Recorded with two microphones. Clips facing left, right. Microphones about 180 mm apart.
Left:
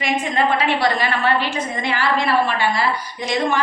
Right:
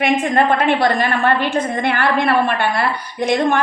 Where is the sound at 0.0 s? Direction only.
55° right (ahead or behind).